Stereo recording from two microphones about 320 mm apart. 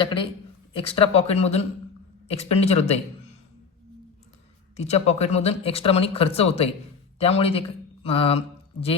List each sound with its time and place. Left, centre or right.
0.0 s speech: centre
4.8 s speech: centre